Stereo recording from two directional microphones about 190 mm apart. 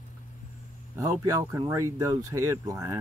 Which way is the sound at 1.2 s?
15° right (ahead or behind).